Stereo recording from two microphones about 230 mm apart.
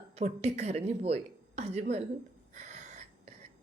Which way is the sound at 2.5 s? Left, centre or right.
Right.